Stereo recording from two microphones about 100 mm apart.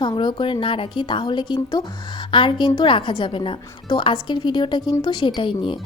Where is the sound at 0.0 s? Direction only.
50° left (ahead or behind).